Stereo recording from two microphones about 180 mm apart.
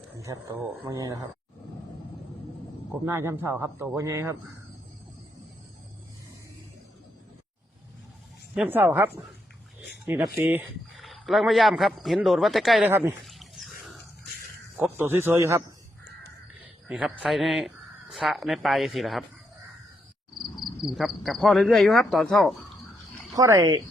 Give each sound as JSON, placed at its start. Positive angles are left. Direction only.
{"t": 0.2, "sound": "a man's voice", "side_deg": -15}
{"t": 3.1, "sound": "speech", "side_deg": -15}
{"t": 8.5, "sound": "speech", "side_deg": -10}
{"t": 10.1, "sound": "speech", "side_deg": -10}
{"t": 10.9, "sound": "speech", "side_deg": 0}
{"t": 12.9, "sound": "speech", "side_deg": -10}
{"t": 13.2, "sound": "dog", "side_deg": 0}
{"t": 14.8, "sound": "speech", "side_deg": -10}
{"t": 16.9, "sound": "speech", "side_deg": 0}
{"t": 20.4, "sound": "speech", "side_deg": 0}
{"t": 23.3, "sound": "a man's voice", "side_deg": -15}